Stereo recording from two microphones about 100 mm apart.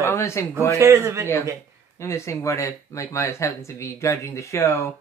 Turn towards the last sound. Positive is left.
turn(degrees=25)  # may be behind; listen again after turning